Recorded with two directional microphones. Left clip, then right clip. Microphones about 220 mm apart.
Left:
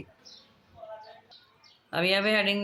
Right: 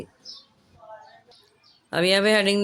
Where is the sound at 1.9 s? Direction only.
50° right (ahead or behind).